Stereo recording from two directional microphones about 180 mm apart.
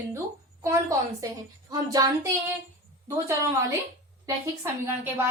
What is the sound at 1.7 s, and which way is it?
Speech, 20° right (ahead or behind).